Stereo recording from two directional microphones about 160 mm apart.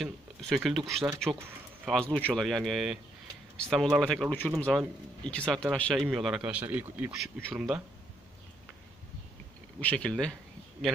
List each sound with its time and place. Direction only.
0.0 s a man's voice: centre (ahead or behind)
9.8 s speech: 10° left (ahead or behind)